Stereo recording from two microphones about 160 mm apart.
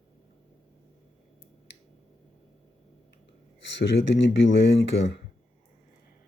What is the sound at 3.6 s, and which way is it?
Speech, 90° left.